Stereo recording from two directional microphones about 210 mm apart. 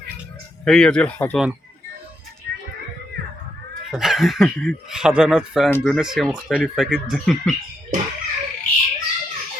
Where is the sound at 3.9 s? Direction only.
Centre (ahead or behind).